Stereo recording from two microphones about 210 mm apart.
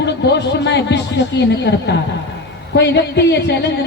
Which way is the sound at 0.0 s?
55° left (ahead or behind).